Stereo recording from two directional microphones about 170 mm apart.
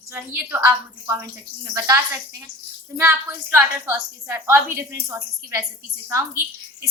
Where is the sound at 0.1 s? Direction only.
15° right (ahead or behind).